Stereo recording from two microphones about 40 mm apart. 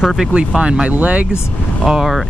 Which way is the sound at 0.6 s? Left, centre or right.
Right.